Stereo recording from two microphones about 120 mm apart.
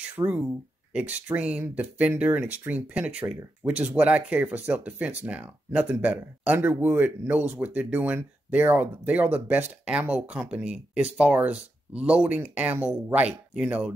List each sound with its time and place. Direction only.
0.1 s speech: 15° right (ahead or behind)